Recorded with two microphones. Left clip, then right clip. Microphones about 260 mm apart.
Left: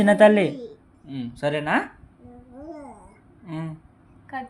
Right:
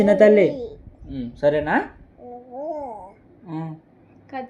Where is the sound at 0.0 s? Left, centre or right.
Left.